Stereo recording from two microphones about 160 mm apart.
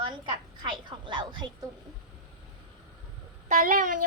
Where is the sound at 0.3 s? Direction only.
30° right (ahead or behind).